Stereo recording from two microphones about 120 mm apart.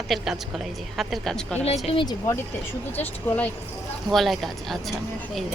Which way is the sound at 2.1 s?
25° left (ahead or behind).